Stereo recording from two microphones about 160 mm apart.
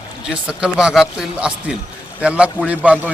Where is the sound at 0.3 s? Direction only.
5° right (ahead or behind).